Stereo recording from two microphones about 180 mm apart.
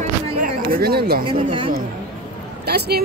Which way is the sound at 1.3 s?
30° right (ahead or behind).